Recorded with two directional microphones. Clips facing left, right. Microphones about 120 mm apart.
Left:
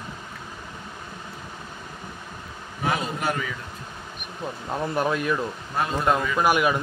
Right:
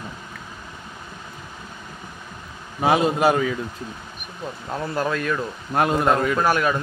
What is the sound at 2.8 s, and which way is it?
Speech, 90° right.